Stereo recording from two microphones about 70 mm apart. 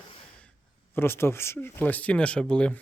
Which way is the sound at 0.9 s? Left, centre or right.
Left.